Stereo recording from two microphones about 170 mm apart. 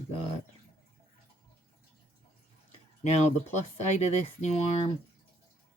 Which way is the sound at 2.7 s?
40° left (ahead or behind).